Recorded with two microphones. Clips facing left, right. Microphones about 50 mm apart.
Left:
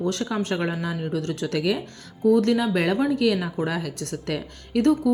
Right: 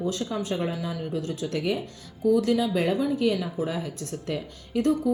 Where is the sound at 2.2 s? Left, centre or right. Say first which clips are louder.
Left 3 dB; left.